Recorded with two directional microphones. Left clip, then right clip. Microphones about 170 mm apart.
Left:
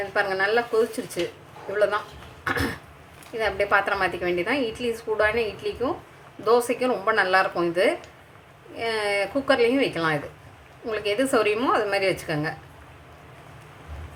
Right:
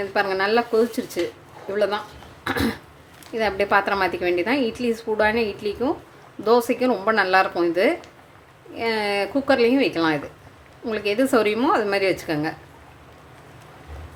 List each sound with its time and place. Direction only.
0.1 s a woman's voice: 20° right (ahead or behind)
2.4 s cough: 20° right (ahead or behind)
3.3 s a woman's voice: 25° right (ahead or behind)